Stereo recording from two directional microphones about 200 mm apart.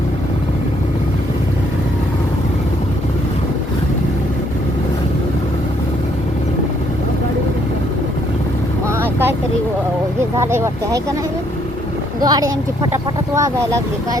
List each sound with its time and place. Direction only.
9.0 s vehicle: 10° right (ahead or behind)
10.3 s speech: 15° right (ahead or behind)
12.2 s speech: 20° right (ahead or behind)